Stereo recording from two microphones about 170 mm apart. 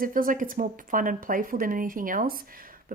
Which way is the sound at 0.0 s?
55° right (ahead or behind).